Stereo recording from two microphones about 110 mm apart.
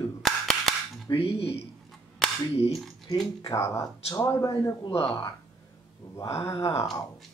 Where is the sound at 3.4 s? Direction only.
30° left (ahead or behind).